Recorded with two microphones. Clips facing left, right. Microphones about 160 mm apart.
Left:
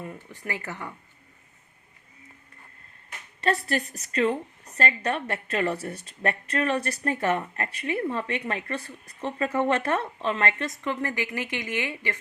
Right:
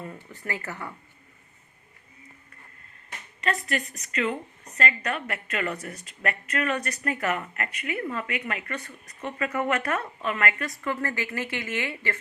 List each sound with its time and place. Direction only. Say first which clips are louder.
0.0 s speech: left 1 dB; 15° left (ahead or behind)
3.4 s a woman's voice: left 3 dB; 30° left (ahead or behind); by 12.1 s 15° left (ahead or behind)